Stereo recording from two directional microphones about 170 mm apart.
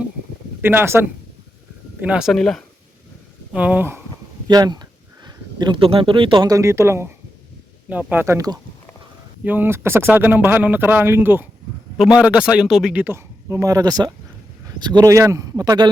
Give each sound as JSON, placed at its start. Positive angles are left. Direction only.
{"t": 0.6, "sound": "a man's voice", "side_deg": -10}
{"t": 3.5, "sound": "a man's voice", "side_deg": -10}
{"t": 4.4, "sound": "a man's voice", "side_deg": -25}